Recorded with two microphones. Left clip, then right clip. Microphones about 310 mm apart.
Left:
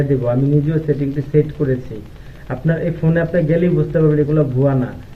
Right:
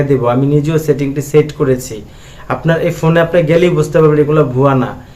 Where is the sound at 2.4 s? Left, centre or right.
Right.